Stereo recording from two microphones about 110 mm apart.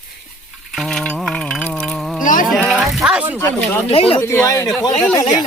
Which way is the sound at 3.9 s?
60° left (ahead or behind).